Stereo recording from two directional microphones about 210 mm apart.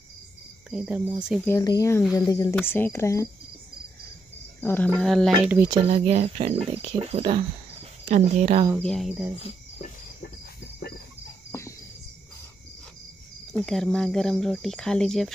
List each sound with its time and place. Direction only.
0.7 s speech: 5° right (ahead or behind)
1.5 s speech: 15° left (ahead or behind)
4.6 s speech: 10° left (ahead or behind); by 5.7 s 10° right (ahead or behind)
5.9 s speech: 30° right (ahead or behind)
8.8 s speech: centre (ahead or behind)
9.4 s cricket: 30° left (ahead or behind)
11.5 s cricket: 15° left (ahead or behind)
13.5 s speech: centre (ahead or behind)